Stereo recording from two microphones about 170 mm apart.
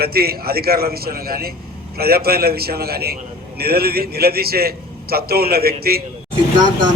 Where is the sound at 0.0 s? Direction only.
65° right (ahead or behind).